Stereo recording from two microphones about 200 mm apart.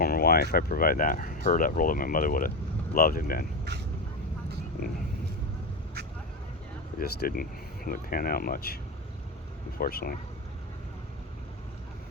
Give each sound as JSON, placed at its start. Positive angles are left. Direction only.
{"t": 0.0, "sound": "speech", "side_deg": 50}
{"t": 7.0, "sound": "speech", "side_deg": 50}